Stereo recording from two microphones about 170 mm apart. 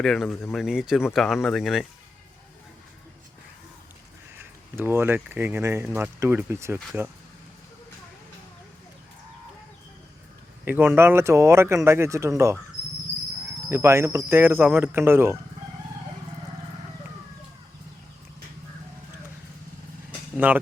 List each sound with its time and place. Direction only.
0.0 s speech: centre (ahead or behind)
4.7 s speech: 15° right (ahead or behind)
10.7 s speech: 10° right (ahead or behind)
13.7 s speech: 15° right (ahead or behind)
20.1 s vehicle: 10° right (ahead or behind)